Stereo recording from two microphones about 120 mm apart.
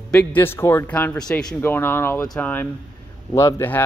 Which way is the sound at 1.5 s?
20° left (ahead or behind).